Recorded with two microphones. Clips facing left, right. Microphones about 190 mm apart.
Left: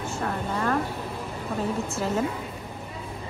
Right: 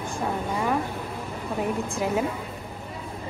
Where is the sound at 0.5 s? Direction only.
10° right (ahead or behind).